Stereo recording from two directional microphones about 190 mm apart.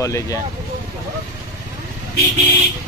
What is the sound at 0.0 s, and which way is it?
Speech, 15° left (ahead or behind).